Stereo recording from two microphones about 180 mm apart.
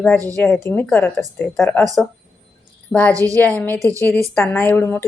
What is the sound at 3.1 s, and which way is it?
Speech, 20° right (ahead or behind).